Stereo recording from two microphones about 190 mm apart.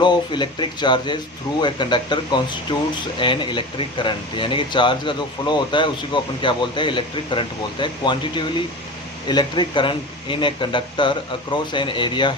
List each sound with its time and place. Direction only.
0.0 s speech: 25° left (ahead or behind)